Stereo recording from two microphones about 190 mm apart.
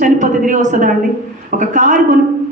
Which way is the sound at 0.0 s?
40° right (ahead or behind).